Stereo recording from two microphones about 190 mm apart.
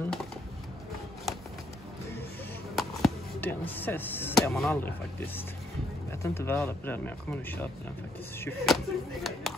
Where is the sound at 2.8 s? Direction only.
Centre (ahead or behind).